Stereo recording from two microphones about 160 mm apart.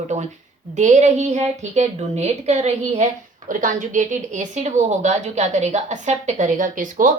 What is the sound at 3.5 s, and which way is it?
A woman's voice, 55° right (ahead or behind).